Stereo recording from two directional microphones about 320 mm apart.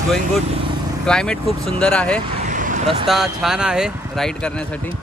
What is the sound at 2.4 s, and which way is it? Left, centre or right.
Vehicle, right.